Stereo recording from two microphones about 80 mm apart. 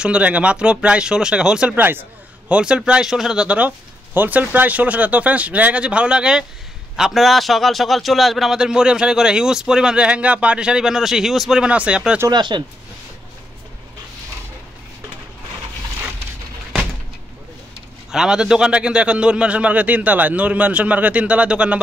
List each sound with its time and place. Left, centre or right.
0.0 s a man's voice: centre
12.3 s speech: right
18.1 s a man's voice: centre